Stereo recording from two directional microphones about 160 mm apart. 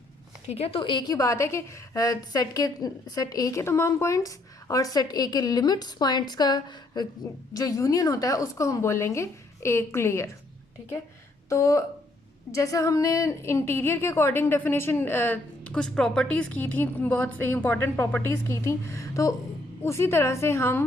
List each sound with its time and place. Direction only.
0.4 s a woman's voice: 40° left (ahead or behind); by 10.2 s 15° left (ahead or behind)
11.4 s a woman's voice: 20° left (ahead or behind)